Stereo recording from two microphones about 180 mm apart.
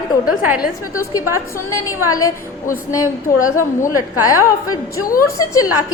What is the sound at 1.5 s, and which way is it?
A woman's voice, 15° left (ahead or behind).